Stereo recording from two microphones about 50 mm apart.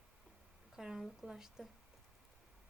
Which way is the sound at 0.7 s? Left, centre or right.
Centre.